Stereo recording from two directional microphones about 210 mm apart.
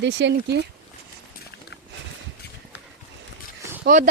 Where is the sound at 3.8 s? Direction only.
40° right (ahead or behind).